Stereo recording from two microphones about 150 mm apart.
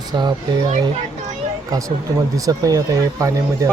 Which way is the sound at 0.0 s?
30° right (ahead or behind).